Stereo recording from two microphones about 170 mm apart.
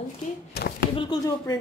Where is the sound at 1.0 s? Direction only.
25° left (ahead or behind).